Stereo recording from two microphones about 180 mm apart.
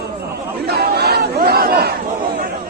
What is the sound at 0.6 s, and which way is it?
Battle cry, 60° right (ahead or behind).